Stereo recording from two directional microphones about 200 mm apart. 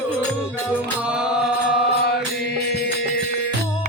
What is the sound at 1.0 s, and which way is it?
Chant, 5° right (ahead or behind).